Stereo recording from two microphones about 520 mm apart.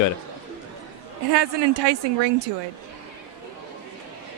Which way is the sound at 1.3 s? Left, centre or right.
Right.